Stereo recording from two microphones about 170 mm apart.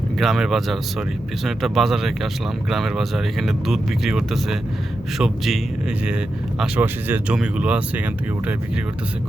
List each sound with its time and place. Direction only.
0.2 s speech: centre (ahead or behind)